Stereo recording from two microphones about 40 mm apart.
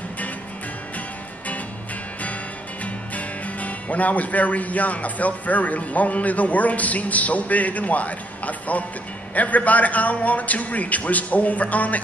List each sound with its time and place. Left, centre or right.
2.8 s a man's voice: left